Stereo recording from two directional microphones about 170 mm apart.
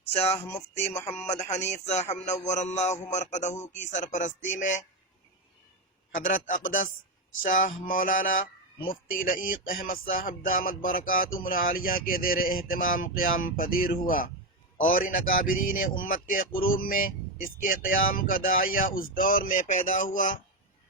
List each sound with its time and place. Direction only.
0.1 s speech: 40° left (ahead or behind)
0.3 s a sound: 15° left (ahead or behind)
0.8 s speech: 40° left (ahead or behind)
6.2 s speech: 50° left (ahead or behind)